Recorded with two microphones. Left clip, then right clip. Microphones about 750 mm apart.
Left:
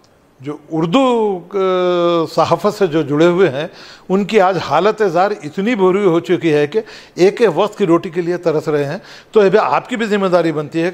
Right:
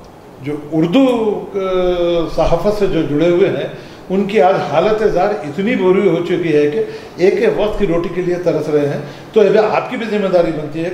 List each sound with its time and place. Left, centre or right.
0.7 s a man's voice: left